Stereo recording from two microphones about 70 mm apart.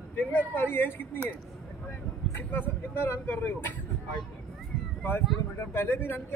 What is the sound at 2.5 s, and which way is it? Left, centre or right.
Speech, left.